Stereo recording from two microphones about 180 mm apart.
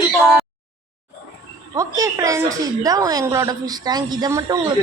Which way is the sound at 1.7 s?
20° right (ahead or behind).